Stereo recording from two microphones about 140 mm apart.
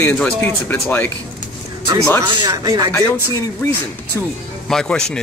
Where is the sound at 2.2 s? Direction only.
30° right (ahead or behind).